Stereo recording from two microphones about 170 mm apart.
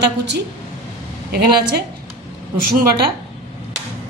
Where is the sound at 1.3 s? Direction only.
65° right (ahead or behind).